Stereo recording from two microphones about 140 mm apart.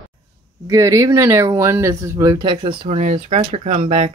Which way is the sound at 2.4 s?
35° right (ahead or behind).